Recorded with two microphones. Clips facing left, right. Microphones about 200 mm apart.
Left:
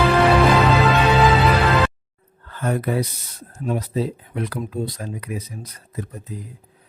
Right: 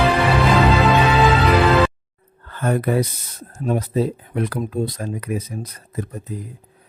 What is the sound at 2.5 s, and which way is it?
Speech, 55° right (ahead or behind).